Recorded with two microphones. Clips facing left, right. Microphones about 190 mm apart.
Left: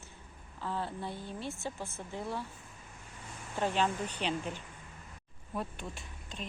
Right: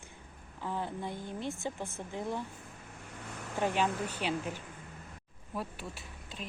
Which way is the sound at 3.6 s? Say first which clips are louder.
Even; 10° right (ahead or behind).